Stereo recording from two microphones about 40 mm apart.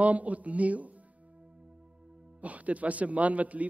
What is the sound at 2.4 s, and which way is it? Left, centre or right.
A man's voice, right.